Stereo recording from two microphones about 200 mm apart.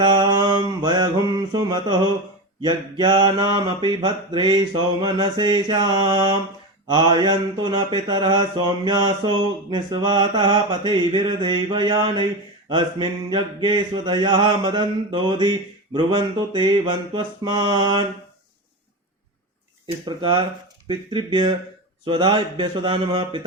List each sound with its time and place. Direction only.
0.0 s mantra: 20° right (ahead or behind)
20.1 s mantra: 25° right (ahead or behind)